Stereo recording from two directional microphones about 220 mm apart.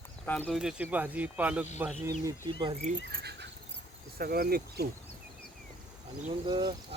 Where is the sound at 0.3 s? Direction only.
5° left (ahead or behind); by 2.3 s 10° right (ahead or behind).